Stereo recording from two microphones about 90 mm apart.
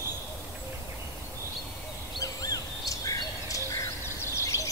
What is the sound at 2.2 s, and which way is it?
Bird, 40° left (ahead or behind).